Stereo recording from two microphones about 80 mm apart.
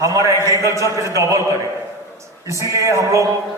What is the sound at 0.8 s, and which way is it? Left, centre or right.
Speech, right.